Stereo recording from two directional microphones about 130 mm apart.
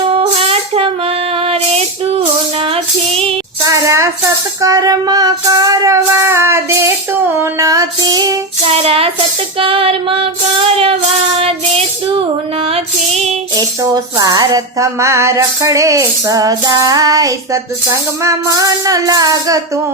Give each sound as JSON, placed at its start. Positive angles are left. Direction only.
{"t": 0.1, "sound": "music", "side_deg": -50}
{"t": 2.6, "sound": "female singing", "side_deg": -45}
{"t": 3.6, "sound": "a sound", "side_deg": -25}
{"t": 4.6, "sound": "child singing", "side_deg": -25}
{"t": 8.6, "sound": "music", "side_deg": -50}
{"t": 9.6, "sound": "female singing", "side_deg": -45}
{"t": 12.6, "sound": "music", "side_deg": -45}
{"t": 13.6, "sound": "music", "side_deg": -30}